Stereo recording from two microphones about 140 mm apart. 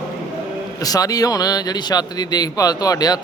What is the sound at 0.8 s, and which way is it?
Speech, 25° left (ahead or behind).